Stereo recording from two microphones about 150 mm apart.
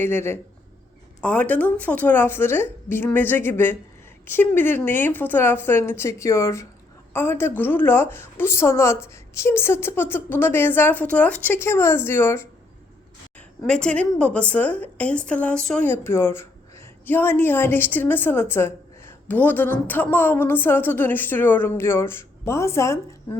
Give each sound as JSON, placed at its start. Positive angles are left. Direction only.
{"t": 0.0, "sound": "a woman's voice", "side_deg": 15}
{"t": 13.7, "sound": "a woman's voice", "side_deg": 5}